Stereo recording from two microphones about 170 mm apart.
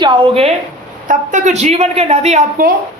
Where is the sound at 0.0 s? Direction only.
30° right (ahead or behind).